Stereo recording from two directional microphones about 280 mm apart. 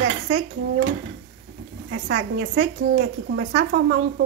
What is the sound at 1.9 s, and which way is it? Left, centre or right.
Speech, right.